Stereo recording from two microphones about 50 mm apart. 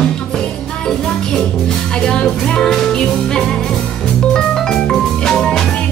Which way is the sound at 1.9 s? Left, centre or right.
Centre.